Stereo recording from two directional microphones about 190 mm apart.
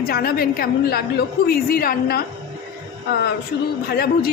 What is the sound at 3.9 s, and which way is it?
Speech, 55° left (ahead or behind).